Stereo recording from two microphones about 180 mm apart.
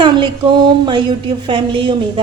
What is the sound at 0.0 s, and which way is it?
A woman's voice, 25° right (ahead or behind).